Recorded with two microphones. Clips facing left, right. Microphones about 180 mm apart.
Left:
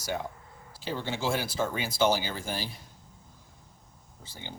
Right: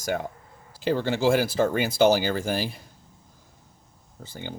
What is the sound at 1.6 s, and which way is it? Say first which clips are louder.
Speech: right 4 dB; 70° right (ahead or behind).